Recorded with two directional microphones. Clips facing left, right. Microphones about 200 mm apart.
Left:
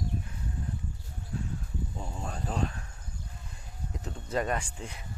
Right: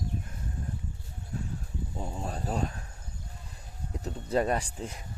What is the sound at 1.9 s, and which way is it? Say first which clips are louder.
Speech: right 3 dB; 20° right (ahead or behind).